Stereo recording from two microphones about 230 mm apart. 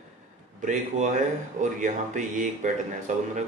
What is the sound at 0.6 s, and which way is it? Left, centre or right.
Speech, right.